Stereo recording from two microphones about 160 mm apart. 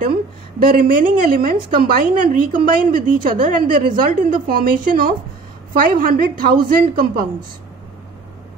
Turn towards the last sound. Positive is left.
turn(degrees=-65)  # may be behind; listen again after turning